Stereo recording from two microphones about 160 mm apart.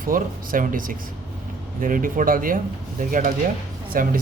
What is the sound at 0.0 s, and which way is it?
Speech, 60° right (ahead or behind).